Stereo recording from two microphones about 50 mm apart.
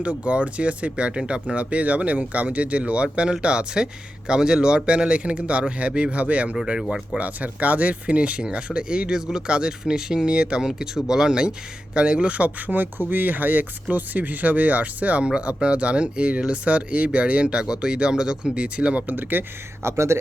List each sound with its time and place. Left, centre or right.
0.0 s speech: right
19.8 s speech: right